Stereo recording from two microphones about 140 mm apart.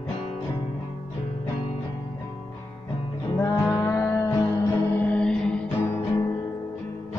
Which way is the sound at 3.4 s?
25° left (ahead or behind).